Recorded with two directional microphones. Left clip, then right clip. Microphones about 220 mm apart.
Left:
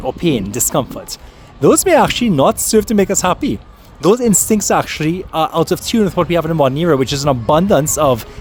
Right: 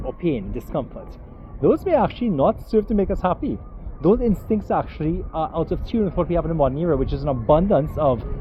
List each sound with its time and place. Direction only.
0.0 s speech: 50° left (ahead or behind)